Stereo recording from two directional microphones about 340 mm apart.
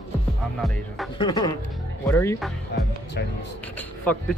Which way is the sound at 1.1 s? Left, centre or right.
Centre.